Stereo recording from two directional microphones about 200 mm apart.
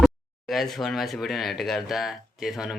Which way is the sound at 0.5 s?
Centre (ahead or behind).